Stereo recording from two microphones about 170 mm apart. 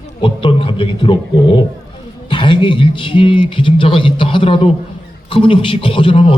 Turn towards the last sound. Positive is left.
turn(degrees=30)  # may be behind; listen again after turning